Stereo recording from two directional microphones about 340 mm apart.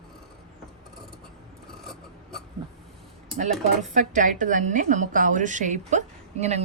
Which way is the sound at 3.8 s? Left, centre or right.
Right.